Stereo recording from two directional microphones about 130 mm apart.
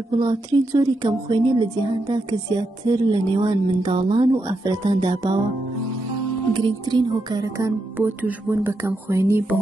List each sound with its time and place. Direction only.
0.2 s a woman's voice: 30° right (ahead or behind)
6.5 s a woman's voice: 35° right (ahead or behind)
8.0 s speech: 15° right (ahead or behind)